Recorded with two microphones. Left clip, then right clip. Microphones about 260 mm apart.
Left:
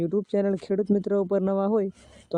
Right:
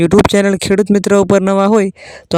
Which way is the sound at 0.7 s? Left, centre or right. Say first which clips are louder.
Right 13 dB; right.